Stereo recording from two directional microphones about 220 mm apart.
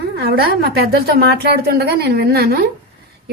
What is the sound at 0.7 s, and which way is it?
A woman's voice, 45° right (ahead or behind).